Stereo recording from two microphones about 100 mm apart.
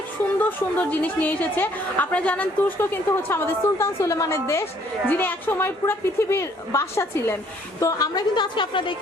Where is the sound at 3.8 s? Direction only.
30° left (ahead or behind).